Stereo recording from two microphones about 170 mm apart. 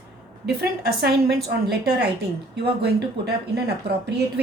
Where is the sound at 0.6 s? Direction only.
70° right (ahead or behind).